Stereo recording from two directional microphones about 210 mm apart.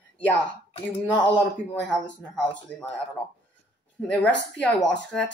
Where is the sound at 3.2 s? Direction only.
10° left (ahead or behind).